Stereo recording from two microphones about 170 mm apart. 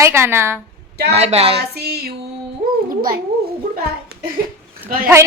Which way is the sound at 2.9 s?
55° right (ahead or behind).